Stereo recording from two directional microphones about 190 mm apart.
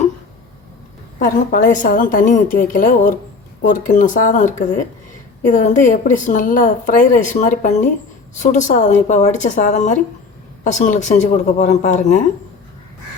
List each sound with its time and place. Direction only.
1.2 s a woman's voice: 45° left (ahead or behind)